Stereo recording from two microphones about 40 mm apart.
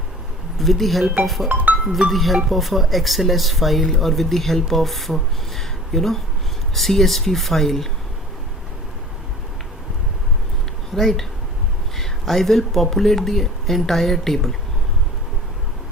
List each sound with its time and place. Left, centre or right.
0.6 s speech: centre
1.5 s speech: right
1.9 s speech: centre
10.9 s speech: centre